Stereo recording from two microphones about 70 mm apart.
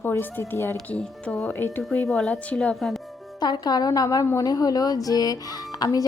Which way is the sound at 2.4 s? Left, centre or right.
Centre.